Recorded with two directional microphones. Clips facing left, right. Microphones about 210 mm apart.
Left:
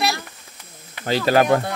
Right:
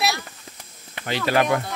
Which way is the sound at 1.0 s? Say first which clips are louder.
Left 4 dB; 35° left (ahead or behind).